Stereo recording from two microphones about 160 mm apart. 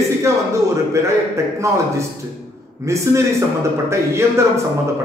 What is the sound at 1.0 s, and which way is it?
A man's voice, 20° right (ahead or behind).